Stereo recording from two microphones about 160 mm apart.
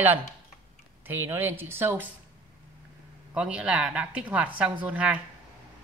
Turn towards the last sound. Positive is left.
turn(degrees=-10)  # may be behind; listen again after turning